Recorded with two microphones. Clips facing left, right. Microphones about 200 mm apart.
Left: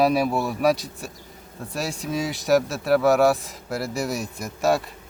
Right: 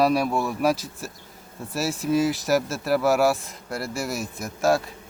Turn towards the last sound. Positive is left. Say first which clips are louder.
# even
turn(degrees=0)  # may be behind; listen again after turning